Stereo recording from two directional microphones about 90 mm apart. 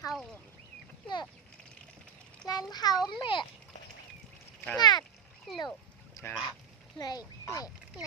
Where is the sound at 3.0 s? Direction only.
65° left (ahead or behind).